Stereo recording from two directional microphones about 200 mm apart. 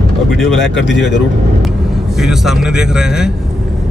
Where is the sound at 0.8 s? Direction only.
65° left (ahead or behind).